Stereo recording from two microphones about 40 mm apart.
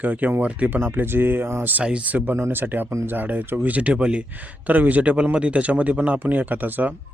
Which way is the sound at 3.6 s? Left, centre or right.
Right.